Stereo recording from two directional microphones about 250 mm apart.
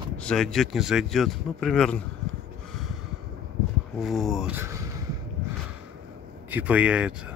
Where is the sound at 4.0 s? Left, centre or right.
Centre.